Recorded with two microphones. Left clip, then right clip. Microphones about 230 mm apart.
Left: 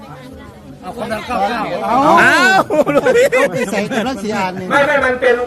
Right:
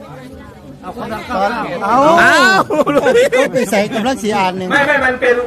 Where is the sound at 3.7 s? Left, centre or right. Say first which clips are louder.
Right 3 dB; right.